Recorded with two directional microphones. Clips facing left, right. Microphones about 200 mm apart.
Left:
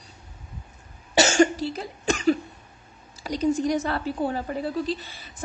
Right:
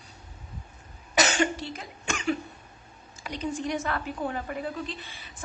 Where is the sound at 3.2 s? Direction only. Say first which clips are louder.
Left 8 dB; 35° left (ahead or behind).